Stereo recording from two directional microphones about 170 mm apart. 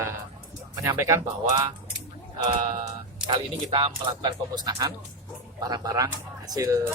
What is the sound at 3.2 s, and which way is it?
Speech, 30° right (ahead or behind).